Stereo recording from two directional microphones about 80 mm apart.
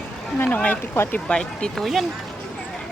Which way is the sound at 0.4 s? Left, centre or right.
Centre.